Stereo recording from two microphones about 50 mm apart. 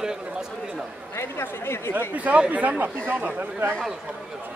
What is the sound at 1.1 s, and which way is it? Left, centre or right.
Speech, left.